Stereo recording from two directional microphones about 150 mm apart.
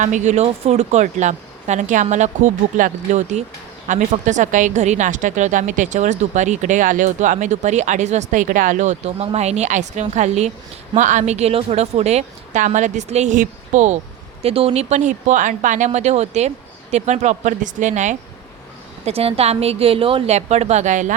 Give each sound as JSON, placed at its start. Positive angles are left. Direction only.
{"t": 0.0, "sound": "a woman's voice", "side_deg": -55}
{"t": 19.0, "sound": "a woman's voice", "side_deg": -40}